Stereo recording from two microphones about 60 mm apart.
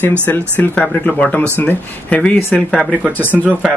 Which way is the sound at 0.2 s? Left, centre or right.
Left.